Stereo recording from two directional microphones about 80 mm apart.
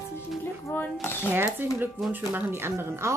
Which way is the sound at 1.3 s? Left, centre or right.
Right.